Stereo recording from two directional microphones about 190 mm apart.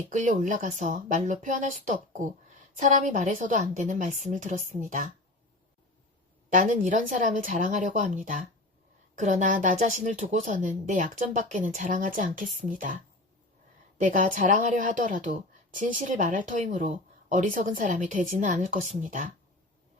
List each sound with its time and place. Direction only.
0.1 s speech: 40° right (ahead or behind)
6.5 s a woman's voice: 45° right (ahead or behind)
14.0 s a woman's voice: 45° right (ahead or behind)